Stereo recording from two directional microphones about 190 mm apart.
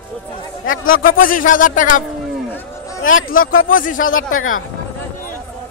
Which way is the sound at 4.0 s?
90° left.